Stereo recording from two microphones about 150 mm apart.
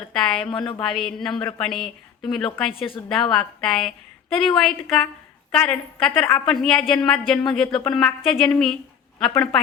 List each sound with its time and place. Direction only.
0.1 s a woman's voice: 5° left (ahead or behind)
2.7 s a woman's voice: 35° left (ahead or behind)
3.1 s a woman's voice: 5° left (ahead or behind)